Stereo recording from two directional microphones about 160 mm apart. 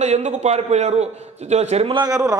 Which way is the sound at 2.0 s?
20° right (ahead or behind).